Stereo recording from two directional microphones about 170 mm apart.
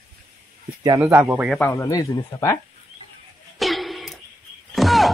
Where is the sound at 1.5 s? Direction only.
10° left (ahead or behind).